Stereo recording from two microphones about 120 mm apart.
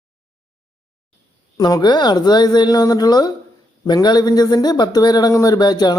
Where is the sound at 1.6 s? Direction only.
35° left (ahead or behind).